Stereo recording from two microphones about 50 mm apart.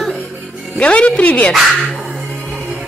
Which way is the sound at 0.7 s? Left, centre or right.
Left.